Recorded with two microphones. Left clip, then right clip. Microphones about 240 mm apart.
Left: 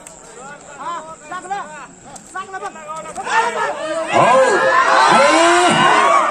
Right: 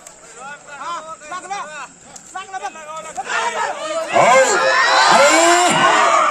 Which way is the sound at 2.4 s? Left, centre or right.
Right.